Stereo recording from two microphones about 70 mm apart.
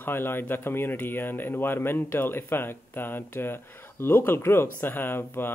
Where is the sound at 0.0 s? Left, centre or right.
Left.